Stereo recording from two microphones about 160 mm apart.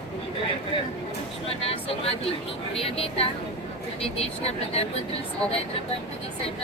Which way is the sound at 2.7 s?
35° left (ahead or behind).